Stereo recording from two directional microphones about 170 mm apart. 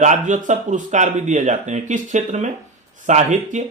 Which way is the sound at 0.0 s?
45° right (ahead or behind).